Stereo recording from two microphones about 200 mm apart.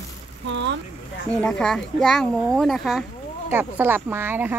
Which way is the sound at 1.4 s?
5° left (ahead or behind).